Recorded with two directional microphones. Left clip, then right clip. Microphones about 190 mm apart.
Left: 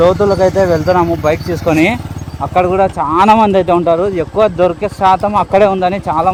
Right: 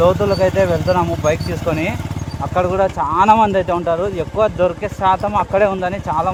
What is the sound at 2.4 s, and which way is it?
Speech, 45° left (ahead or behind).